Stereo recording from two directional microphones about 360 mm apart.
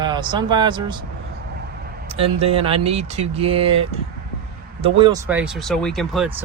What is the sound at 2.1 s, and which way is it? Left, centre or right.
Speech, centre.